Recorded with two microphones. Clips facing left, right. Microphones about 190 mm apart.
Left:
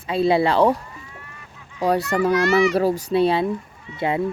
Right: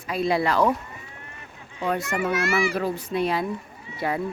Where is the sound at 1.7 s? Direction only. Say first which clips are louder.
Left 6 dB; 35° left (ahead or behind).